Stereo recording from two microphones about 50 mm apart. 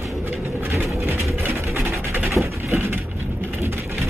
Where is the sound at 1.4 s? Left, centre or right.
Right.